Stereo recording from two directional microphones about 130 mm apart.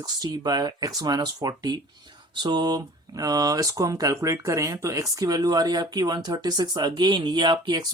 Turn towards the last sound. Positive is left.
turn(degrees=-35)  # may be behind; listen again after turning